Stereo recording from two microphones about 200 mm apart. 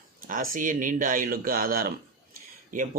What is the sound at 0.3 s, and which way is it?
A man's voice, 40° right (ahead or behind).